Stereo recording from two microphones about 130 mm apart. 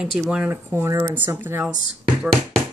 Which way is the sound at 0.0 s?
10° right (ahead or behind).